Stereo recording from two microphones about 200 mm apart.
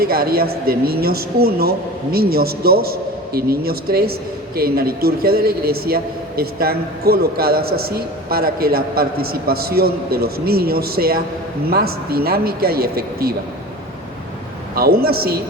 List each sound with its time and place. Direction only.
0.0 s a man's voice: 50° right (ahead or behind)
14.8 s a man's voice: 50° right (ahead or behind)